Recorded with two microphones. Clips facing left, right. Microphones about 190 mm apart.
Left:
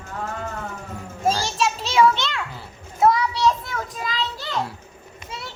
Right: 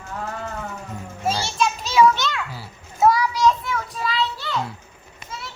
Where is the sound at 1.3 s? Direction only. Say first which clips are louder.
Left 1 dB; 35° left (ahead or behind).